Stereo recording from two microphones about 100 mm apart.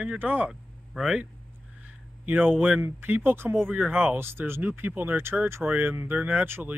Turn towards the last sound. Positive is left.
turn(degrees=-20)  # may be behind; listen again after turning